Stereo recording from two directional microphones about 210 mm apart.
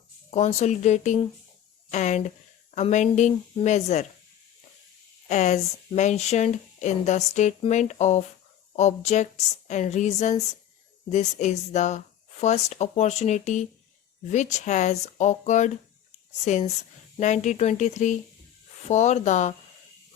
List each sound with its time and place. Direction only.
0.3 s speech: 30° left (ahead or behind)
5.3 s speech: 35° left (ahead or behind)